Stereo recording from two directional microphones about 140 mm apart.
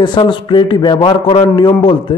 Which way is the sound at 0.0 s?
35° left (ahead or behind).